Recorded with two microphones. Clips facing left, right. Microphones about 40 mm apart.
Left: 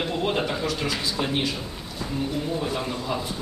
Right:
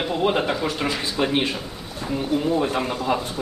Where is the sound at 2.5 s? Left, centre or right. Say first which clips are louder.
Right 5 dB; right.